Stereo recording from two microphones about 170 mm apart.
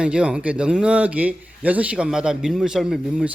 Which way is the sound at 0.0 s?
5° right (ahead or behind).